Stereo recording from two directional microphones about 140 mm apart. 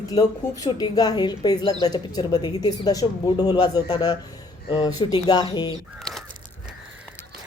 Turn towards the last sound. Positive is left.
turn(degrees=5)  # may be behind; listen again after turning